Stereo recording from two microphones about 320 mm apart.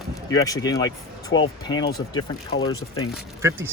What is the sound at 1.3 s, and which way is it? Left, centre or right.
Speech, left.